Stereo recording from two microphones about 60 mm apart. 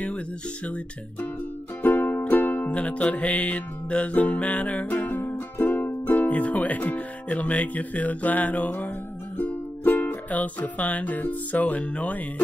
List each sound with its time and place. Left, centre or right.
1.8 s music: left